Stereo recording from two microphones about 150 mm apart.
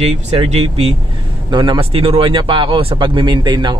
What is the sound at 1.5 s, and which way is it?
Speech, 30° right (ahead or behind).